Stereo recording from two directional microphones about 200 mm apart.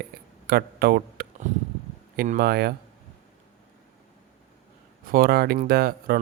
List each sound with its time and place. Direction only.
0.4 s speech: 50° right (ahead or behind)
2.1 s speech: 40° right (ahead or behind)
2.4 s speech: 50° right (ahead or behind)
5.0 s speech: 45° right (ahead or behind)